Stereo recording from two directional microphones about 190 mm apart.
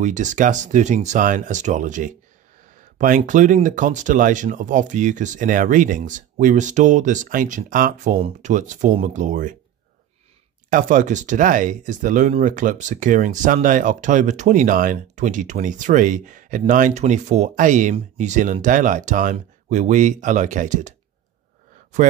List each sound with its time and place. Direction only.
0.0 s speech: 40° right (ahead or behind)
10.7 s speech: 45° right (ahead or behind)